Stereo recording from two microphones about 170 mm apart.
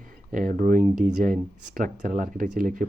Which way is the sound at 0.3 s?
55° right (ahead or behind).